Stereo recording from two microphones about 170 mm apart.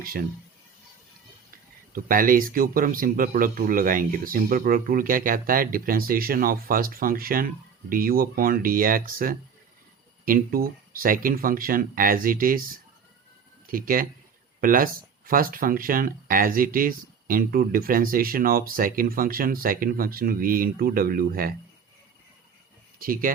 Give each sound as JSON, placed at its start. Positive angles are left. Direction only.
{"t": 0.0, "sound": "speech", "side_deg": -60}
{"t": 1.5, "sound": "speech", "side_deg": -55}
{"t": 13.7, "sound": "speech", "side_deg": -55}
{"t": 23.0, "sound": "speech", "side_deg": -55}